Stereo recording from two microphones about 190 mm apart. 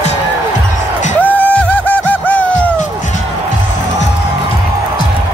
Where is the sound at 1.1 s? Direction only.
10° left (ahead or behind).